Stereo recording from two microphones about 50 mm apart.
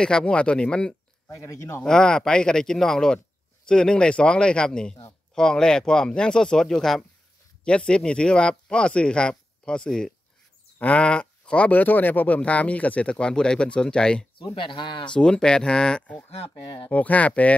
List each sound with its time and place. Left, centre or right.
0.0 s speech: centre
1.3 s speech: left
1.9 s speech: centre
7.6 s speech: centre
10.8 s speech: left
12.4 s speech: left
16.9 s speech: left